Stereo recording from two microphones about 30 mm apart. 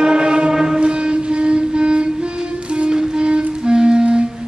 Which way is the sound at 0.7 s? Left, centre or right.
Right.